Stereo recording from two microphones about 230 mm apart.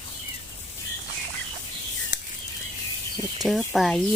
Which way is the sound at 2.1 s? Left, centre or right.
Left.